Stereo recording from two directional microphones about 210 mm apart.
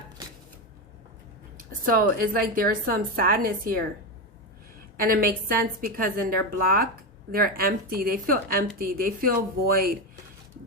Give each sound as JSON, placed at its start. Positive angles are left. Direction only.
{"t": 1.5, "sound": "a woman's voice", "side_deg": -45}
{"t": 4.9, "sound": "a woman's voice", "side_deg": -45}